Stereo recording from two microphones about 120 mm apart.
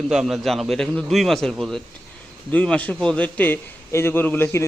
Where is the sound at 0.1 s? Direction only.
5° right (ahead or behind).